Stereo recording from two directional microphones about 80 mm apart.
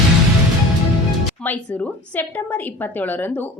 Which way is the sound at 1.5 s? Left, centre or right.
Centre.